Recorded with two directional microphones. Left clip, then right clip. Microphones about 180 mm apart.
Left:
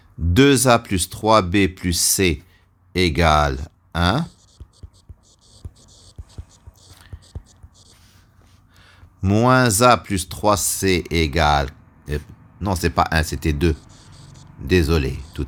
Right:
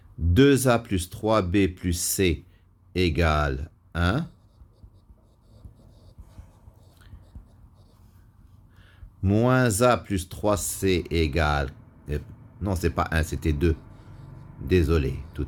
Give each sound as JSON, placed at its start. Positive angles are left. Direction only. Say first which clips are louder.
{"t": 0.3, "sound": "speech", "louder": "left 5 dB", "side_deg": 40}
{"t": 5.5, "sound": "whispering", "louder": "left 8 dB", "side_deg": 50}
{"t": 8.8, "sound": "speech", "louder": "left 4 dB", "side_deg": 40}
{"t": 13.7, "sound": "a sound", "louder": "left 4 dB", "side_deg": 20}
{"t": 14.7, "sound": "speech", "louder": "left 4 dB", "side_deg": 40}